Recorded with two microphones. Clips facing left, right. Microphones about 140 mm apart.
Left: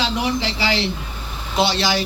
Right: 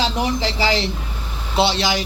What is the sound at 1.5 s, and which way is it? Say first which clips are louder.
Speech: right 1 dB; 20° right (ahead or behind).